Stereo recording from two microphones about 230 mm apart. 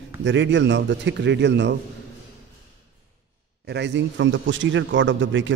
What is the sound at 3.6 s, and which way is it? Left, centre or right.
Speech, right.